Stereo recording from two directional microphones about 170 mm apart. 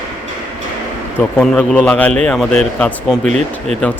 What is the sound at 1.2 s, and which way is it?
Speech, 5° left (ahead or behind).